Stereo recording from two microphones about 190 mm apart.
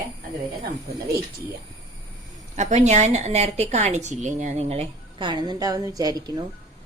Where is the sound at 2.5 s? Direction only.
35° right (ahead or behind); by 6.4 s 20° right (ahead or behind).